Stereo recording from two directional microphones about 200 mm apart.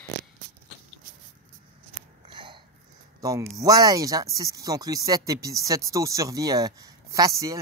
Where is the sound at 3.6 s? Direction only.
20° right (ahead or behind).